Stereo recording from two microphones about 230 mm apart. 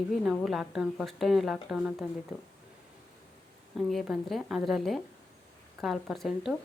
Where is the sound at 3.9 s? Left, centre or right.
Centre.